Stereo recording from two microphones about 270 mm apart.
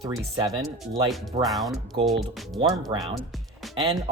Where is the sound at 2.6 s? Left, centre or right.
Centre.